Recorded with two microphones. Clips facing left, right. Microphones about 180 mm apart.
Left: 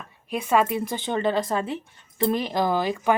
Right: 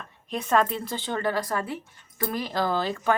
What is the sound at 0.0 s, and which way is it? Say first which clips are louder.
A woman's voice: left 2 dB; 10° left (ahead or behind).